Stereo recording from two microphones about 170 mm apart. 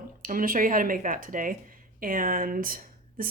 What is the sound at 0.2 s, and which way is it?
Speech, 55° right (ahead or behind).